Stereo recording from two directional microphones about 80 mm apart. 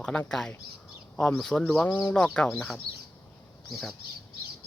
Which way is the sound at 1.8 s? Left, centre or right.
Left.